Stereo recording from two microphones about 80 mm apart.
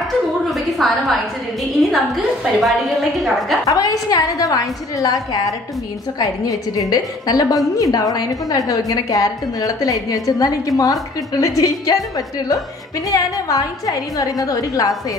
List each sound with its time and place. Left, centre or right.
0.5 s a woman's voice: centre
3.6 s a woman's voice: left